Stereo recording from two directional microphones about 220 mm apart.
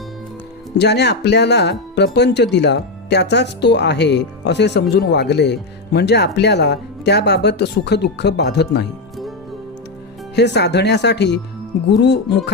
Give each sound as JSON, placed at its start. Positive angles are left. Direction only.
{"t": 0.8, "sound": "speech", "side_deg": 50}
{"t": 10.3, "sound": "speech", "side_deg": 50}